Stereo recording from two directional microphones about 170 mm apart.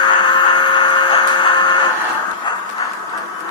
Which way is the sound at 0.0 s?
25° left (ahead or behind).